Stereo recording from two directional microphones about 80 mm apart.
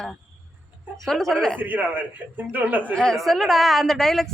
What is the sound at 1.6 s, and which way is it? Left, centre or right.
A man's voice, right.